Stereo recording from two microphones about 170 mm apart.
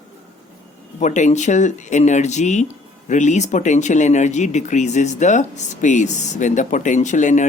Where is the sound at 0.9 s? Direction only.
45° left (ahead or behind).